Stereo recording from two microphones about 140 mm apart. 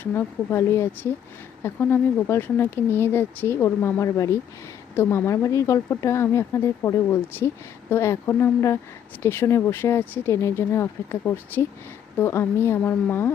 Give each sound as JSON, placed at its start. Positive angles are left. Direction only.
{"t": 0.0, "sound": "speech", "side_deg": 15}